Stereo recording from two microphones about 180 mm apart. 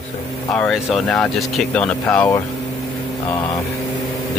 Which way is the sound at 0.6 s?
Centre (ahead or behind).